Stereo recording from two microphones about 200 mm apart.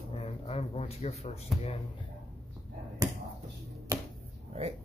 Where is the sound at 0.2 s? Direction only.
30° left (ahead or behind).